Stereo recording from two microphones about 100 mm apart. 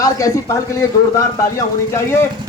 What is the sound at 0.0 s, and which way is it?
A man's voice, 35° left (ahead or behind).